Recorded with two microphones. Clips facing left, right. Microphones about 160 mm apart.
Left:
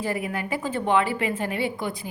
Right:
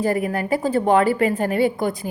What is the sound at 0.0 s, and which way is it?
A woman's voice, 40° right (ahead or behind).